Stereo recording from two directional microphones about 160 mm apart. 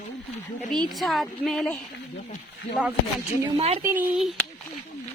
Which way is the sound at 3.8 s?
15° right (ahead or behind).